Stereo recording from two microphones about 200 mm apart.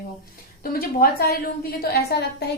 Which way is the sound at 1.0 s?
50° left (ahead or behind).